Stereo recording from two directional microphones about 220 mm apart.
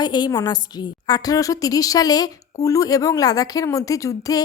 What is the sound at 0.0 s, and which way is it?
A woman's voice, 20° left (ahead or behind).